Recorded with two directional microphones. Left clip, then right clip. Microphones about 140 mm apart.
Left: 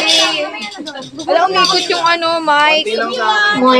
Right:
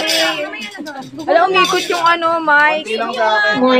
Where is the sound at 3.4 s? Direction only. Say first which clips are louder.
Left 1 dB; 35° left (ahead or behind).